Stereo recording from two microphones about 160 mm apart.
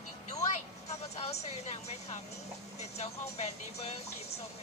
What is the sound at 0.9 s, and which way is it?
Speech, 40° left (ahead or behind).